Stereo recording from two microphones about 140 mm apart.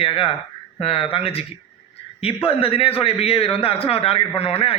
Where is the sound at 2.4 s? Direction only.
40° left (ahead or behind).